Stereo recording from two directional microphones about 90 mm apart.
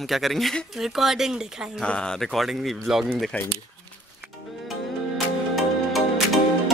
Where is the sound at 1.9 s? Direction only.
10° left (ahead or behind).